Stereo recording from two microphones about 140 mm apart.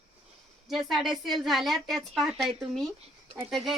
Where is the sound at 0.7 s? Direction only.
Centre (ahead or behind).